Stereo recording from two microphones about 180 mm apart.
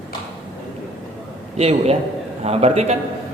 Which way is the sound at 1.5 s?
35° right (ahead or behind).